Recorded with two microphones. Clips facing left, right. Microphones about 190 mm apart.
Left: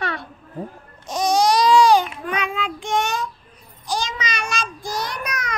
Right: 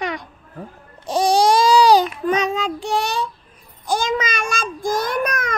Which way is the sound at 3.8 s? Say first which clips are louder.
Right 6 dB; 55° right (ahead or behind).